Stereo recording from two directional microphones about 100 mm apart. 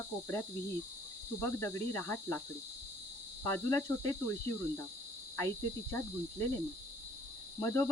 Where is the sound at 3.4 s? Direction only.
25° left (ahead or behind).